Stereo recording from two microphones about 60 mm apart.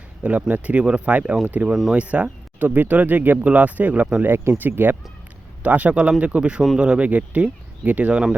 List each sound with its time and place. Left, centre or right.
0.2 s speech: right
1.6 s speech: centre
2.0 s speech: right